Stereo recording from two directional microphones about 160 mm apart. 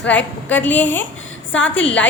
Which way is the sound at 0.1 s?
10° left (ahead or behind).